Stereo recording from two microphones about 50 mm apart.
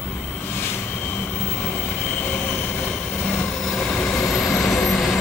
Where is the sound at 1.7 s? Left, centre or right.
Left.